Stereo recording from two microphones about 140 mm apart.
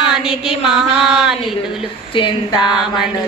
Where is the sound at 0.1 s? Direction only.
5° right (ahead or behind).